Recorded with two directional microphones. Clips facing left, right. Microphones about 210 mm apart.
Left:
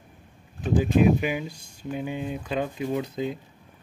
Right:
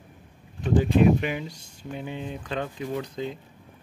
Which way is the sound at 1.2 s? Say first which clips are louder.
Left 2 dB; 10° left (ahead or behind).